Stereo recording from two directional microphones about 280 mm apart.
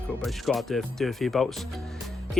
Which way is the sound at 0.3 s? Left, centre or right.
Centre.